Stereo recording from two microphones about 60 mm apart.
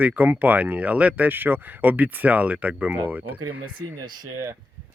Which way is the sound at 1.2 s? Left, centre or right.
Right.